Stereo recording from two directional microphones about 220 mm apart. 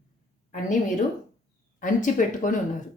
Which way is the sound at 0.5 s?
35° left (ahead or behind).